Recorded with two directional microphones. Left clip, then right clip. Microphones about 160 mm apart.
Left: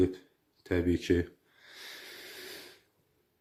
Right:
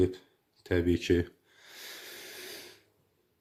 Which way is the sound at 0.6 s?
15° right (ahead or behind).